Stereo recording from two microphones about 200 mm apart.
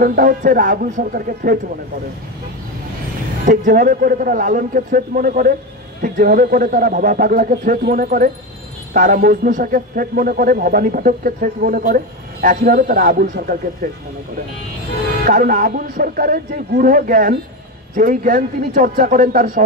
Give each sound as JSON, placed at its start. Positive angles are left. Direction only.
{"t": 0.0, "sound": "a man's voice", "side_deg": -45}
{"t": 3.4, "sound": "a man's voice", "side_deg": -45}
{"t": 15.2, "sound": "a man's voice", "side_deg": -45}